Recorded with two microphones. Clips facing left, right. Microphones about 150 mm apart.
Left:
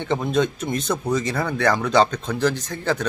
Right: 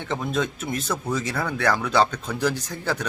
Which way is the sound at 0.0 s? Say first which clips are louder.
Left 5 dB; centre (ahead or behind).